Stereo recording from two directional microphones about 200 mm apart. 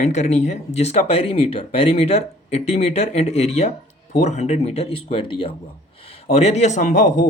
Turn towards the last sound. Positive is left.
turn(degrees=40)  # may be behind; listen again after turning